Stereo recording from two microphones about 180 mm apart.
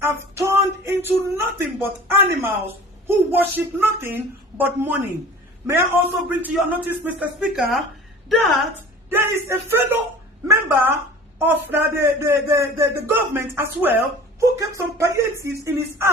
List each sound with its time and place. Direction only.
0.0 s a woman's voice: 15° right (ahead or behind)
9.1 s a woman's voice: 15° right (ahead or behind)